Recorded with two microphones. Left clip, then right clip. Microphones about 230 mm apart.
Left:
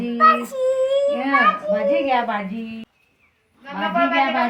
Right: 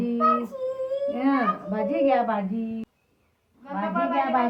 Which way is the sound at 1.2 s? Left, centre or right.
Right.